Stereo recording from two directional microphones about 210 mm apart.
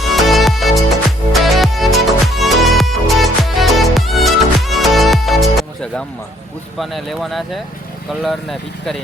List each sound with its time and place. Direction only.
0.1 s music: centre (ahead or behind)
6.7 s speech: centre (ahead or behind)